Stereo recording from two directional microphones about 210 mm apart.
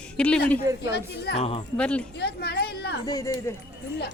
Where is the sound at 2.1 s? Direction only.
50° left (ahead or behind).